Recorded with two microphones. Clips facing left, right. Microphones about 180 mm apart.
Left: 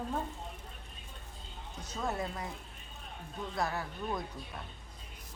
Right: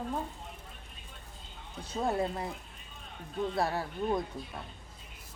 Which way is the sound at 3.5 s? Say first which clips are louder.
Even; 30° right (ahead or behind).